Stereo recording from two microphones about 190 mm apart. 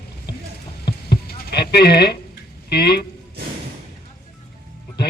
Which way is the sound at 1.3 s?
55° left (ahead or behind).